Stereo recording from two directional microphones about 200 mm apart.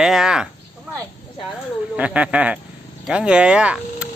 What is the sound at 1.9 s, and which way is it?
Speech, 5° right (ahead or behind).